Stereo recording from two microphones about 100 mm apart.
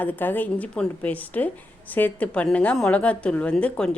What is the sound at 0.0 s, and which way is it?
A woman's voice, 20° left (ahead or behind).